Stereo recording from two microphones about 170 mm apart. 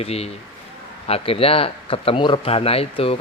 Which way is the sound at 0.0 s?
35° left (ahead or behind).